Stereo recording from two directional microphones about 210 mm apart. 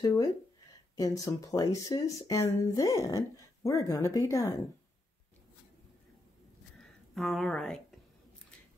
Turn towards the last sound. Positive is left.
turn(degrees=5)  # may be behind; listen again after turning